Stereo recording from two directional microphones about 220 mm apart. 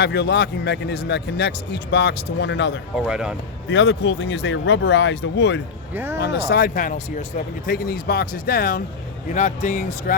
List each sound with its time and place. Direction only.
0.0 s speech: 50° left (ahead or behind)
3.0 s speech: 5° right (ahead or behind)
3.7 s speech: 55° left (ahead or behind)
5.9 s speech: 10° right (ahead or behind)
6.1 s speech: 50° left (ahead or behind)